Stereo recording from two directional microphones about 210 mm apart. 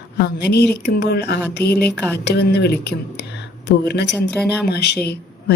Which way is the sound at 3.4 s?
50° left (ahead or behind).